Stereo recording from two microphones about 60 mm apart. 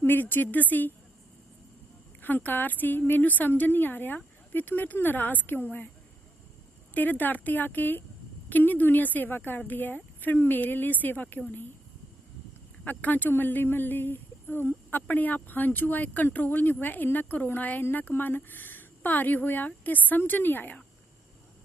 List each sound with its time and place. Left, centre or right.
0.0 s speech: left
2.2 s speech: left
6.9 s speech: left
12.8 s speech: left